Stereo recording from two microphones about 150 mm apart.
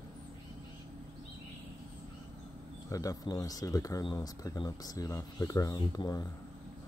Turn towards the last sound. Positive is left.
turn(degrees=25)  # may be behind; listen again after turning